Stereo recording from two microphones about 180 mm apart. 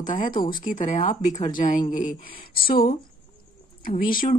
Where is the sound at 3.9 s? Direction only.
50° left (ahead or behind).